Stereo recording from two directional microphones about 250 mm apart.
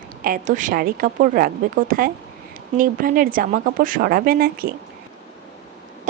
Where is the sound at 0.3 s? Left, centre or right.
Right.